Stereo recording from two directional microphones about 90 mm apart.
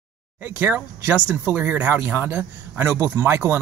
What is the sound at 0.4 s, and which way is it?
Speech, 20° right (ahead or behind).